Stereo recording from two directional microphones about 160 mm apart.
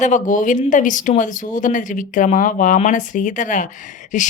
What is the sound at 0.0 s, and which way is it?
Speech, 50° left (ahead or behind).